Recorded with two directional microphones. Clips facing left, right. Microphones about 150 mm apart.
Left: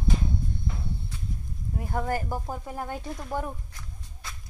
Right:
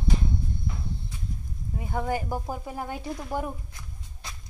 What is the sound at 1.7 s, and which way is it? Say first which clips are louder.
Speech: even; centre (ahead or behind).